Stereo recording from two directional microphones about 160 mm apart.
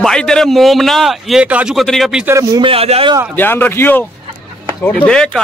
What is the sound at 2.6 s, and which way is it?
Speech, 35° right (ahead or behind).